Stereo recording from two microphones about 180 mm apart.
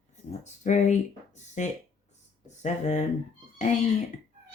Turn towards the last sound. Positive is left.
turn(degrees=40)  # may be behind; listen again after turning